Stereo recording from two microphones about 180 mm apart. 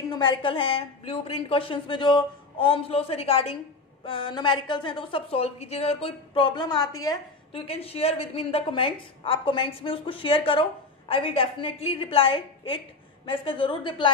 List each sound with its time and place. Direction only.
0.1 s a woman's voice: 25° left (ahead or behind)
7.6 s a woman's voice: 35° left (ahead or behind)